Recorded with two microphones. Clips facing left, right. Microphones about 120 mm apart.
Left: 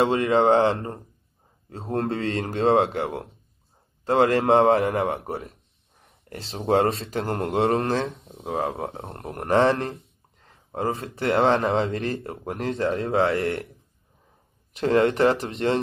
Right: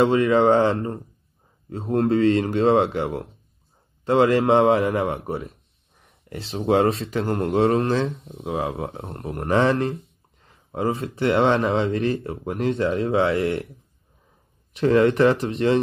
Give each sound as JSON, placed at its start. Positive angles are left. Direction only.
{"t": 0.0, "sound": "a man's voice", "side_deg": 30}
{"t": 10.4, "sound": "a sound", "side_deg": 35}
{"t": 11.1, "sound": "a man's voice", "side_deg": 35}
{"t": 14.8, "sound": "a man's voice", "side_deg": 35}